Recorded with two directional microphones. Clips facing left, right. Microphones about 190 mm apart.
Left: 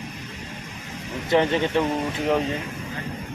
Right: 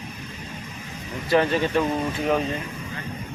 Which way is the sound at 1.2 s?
20° left (ahead or behind).